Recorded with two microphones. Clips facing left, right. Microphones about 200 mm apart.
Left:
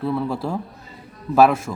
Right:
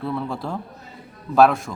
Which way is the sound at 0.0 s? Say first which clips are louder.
Left 4 dB; centre (ahead or behind).